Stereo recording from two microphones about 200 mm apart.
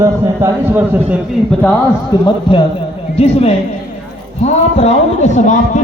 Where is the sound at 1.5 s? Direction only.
5° left (ahead or behind).